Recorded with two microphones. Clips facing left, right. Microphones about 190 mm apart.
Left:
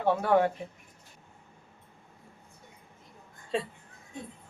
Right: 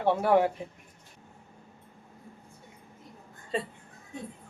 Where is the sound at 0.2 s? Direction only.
10° right (ahead or behind).